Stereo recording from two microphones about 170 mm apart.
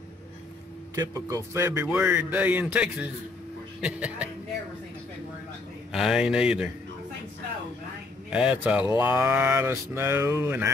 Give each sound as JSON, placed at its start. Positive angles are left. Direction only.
{"t": 0.9, "sound": "speech", "side_deg": -20}
{"t": 5.9, "sound": "speech", "side_deg": -5}
{"t": 8.3, "sound": "speech", "side_deg": -5}